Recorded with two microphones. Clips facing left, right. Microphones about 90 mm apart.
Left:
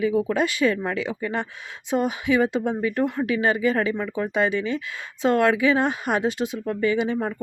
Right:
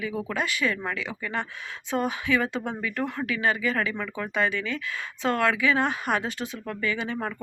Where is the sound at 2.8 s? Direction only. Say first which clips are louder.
Left 6 dB; 30° left (ahead or behind).